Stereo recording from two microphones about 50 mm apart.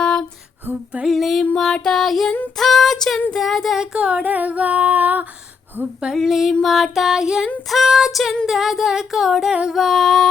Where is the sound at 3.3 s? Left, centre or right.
Centre.